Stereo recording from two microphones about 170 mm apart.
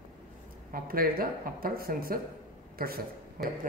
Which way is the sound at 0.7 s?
60° right (ahead or behind).